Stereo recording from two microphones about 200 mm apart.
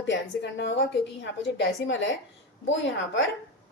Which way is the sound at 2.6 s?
70° left (ahead or behind).